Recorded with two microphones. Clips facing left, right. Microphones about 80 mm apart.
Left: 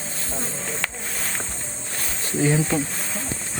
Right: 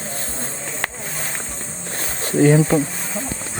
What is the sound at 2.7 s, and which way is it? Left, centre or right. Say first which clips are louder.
Speech: right 6 dB; centre.